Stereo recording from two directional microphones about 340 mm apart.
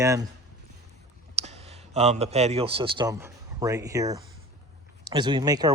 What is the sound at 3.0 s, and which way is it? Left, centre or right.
Speech, centre.